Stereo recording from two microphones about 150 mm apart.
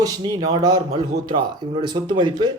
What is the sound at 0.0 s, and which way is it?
Speech, 25° right (ahead or behind).